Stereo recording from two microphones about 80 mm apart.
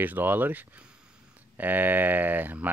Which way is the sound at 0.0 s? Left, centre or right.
Right.